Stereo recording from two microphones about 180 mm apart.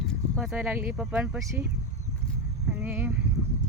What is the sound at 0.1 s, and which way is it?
Speech, 5° right (ahead or behind).